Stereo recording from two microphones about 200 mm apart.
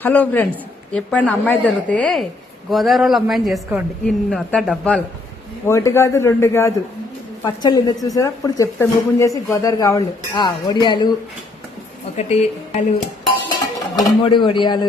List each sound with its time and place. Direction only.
0.0 s a woman's voice: 10° left (ahead or behind)
5.6 s a woman's voice: 15° left (ahead or behind)
12.1 s speech: 35° left (ahead or behind)
13.9 s speech: 20° left (ahead or behind)